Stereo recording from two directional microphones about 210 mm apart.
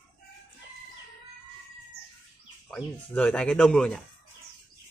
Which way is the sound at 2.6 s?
5° left (ahead or behind).